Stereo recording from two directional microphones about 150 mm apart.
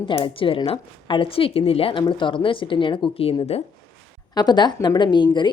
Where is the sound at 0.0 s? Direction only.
35° left (ahead or behind).